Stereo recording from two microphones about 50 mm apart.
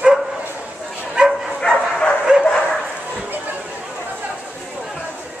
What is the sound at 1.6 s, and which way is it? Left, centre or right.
Bow-wow, centre.